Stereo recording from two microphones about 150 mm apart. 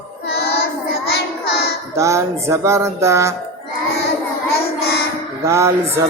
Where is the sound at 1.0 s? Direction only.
90° left.